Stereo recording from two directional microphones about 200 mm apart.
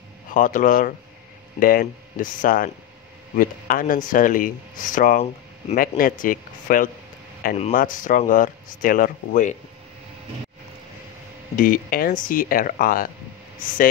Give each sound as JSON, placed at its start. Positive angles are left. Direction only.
{"t": 0.3, "sound": "speech", "side_deg": 40}
{"t": 11.5, "sound": "speech", "side_deg": 45}